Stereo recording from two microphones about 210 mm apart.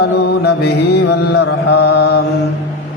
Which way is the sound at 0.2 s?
50° left (ahead or behind).